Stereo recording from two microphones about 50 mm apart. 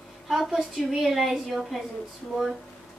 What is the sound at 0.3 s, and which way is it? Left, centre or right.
A woman's voice, centre.